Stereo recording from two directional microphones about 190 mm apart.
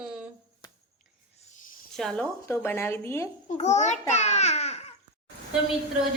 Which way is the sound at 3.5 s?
35° left (ahead or behind).